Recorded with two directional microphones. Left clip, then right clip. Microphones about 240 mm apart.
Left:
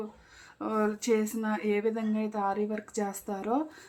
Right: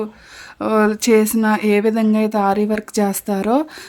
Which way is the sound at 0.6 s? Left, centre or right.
Right.